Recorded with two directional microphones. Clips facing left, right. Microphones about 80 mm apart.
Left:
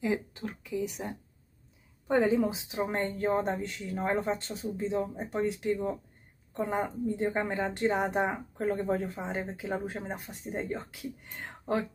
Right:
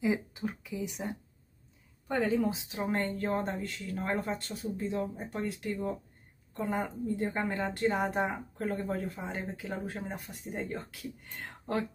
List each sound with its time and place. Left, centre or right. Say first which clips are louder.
0.0 s speech: even; centre
2.0 s speech: left 3 dB; left